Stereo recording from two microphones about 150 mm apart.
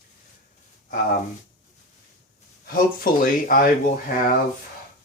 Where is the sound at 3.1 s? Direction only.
70° left (ahead or behind).